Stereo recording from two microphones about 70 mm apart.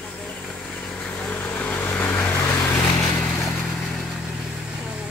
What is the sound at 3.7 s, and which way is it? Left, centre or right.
Vehicle, centre.